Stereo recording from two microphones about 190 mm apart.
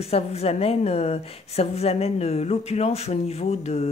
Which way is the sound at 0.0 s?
35° left (ahead or behind).